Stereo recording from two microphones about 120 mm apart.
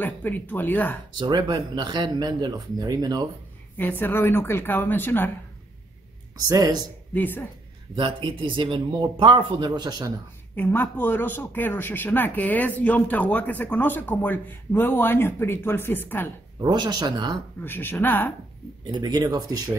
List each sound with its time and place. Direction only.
0.0 s a man's voice: 15° left (ahead or behind)
1.2 s speech: 35° right (ahead or behind)
3.7 s a man's voice: 15° left (ahead or behind)
6.3 s speech: 30° right (ahead or behind)
7.2 s a man's voice: 15° left (ahead or behind)
7.9 s speech: 45° right (ahead or behind)
10.5 s a man's voice: 15° left (ahead or behind)
16.6 s speech: 40° right (ahead or behind)
17.6 s a man's voice: 15° left (ahead or behind)
18.9 s speech: 35° right (ahead or behind)